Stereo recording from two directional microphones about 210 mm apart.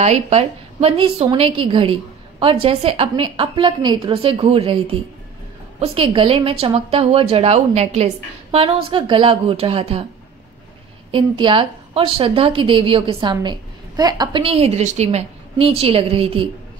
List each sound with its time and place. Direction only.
0.0 s a woman's voice: 30° right (ahead or behind)
11.1 s a woman's voice: 25° right (ahead or behind)